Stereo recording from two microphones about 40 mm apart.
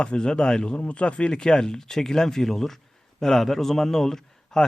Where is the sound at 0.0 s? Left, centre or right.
Left.